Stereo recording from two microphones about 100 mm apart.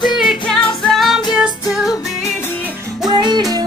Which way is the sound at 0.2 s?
Centre (ahead or behind).